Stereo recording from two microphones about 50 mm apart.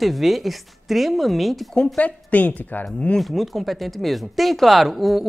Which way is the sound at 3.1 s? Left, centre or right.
Centre.